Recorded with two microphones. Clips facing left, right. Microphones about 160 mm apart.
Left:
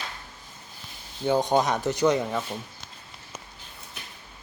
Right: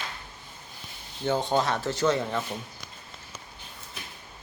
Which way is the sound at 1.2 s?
15° left (ahead or behind).